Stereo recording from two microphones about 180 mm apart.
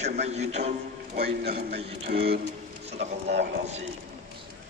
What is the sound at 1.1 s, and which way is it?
A man's voice, 60° right (ahead or behind).